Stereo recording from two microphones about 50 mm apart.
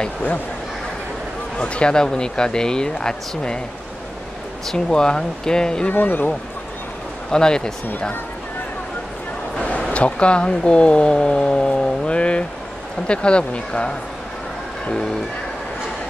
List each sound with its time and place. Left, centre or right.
0.0 s speech: left
1.6 s speech: centre
4.6 s speech: centre
5.9 s speech: left
7.2 s speech: centre
9.6 s a sound: left
9.9 s speech: left